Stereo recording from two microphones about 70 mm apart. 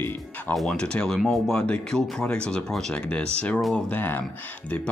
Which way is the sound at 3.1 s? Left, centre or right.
Centre.